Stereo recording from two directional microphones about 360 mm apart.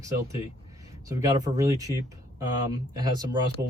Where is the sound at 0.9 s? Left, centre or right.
Centre.